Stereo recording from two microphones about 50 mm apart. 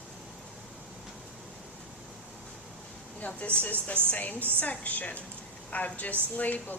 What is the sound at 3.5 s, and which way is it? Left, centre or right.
A woman's voice, left.